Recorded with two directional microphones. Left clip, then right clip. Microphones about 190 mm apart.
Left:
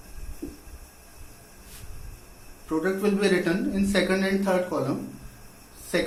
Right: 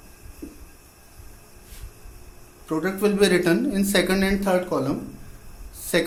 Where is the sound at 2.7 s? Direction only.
60° right (ahead or behind).